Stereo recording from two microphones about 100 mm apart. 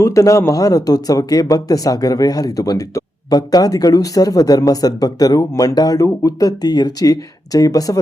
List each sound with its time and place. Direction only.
0.0 s speech: 30° left (ahead or behind)